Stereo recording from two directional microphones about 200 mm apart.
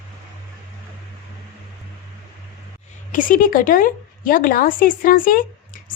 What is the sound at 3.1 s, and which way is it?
Speech, 45° left (ahead or behind).